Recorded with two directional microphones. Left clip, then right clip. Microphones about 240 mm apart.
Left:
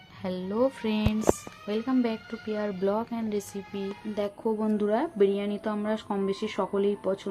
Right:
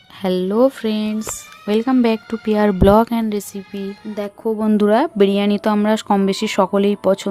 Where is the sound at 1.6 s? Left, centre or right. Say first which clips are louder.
Right 12 dB; right.